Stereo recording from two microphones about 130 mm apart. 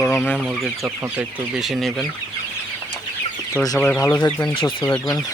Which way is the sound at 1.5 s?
Centre (ahead or behind).